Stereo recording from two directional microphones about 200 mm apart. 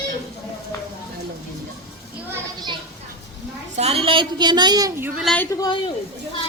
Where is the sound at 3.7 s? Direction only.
30° right (ahead or behind).